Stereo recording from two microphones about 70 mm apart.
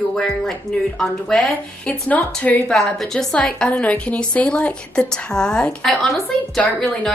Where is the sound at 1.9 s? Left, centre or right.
Left.